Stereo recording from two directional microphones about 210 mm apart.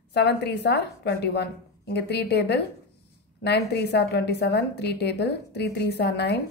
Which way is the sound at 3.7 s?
55° left (ahead or behind).